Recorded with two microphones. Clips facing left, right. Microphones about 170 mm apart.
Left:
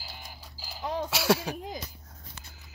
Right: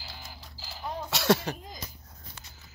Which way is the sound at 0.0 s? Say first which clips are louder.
Even; 10° left (ahead or behind).